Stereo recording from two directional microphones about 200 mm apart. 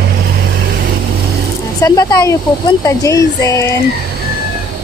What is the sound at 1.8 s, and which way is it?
Speech, 15° left (ahead or behind).